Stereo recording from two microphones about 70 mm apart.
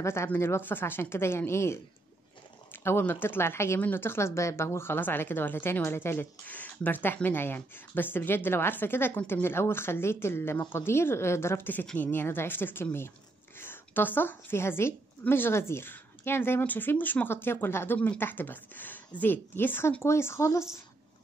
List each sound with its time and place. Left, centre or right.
0.0 s a woman's voice: left